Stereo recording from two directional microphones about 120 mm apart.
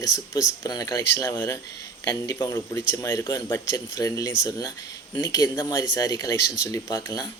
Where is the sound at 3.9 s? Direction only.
30° left (ahead or behind).